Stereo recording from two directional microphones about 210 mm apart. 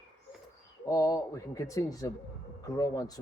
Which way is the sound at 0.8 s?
15° left (ahead or behind).